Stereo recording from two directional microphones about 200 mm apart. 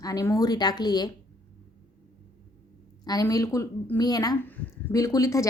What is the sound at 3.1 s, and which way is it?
A woman's voice, 15° left (ahead or behind).